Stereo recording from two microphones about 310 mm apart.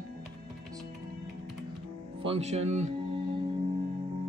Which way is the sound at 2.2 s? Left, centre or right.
Centre.